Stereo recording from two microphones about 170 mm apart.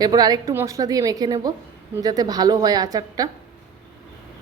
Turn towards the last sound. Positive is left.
turn(degrees=-20)  # may be behind; listen again after turning